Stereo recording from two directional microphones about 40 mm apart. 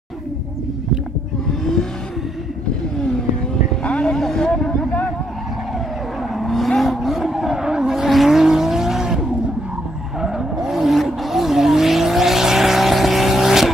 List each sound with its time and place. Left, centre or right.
1.5 s vehicle: centre
3.8 s vehicle: left
4.1 s vehicle: centre
6.3 s vehicle: centre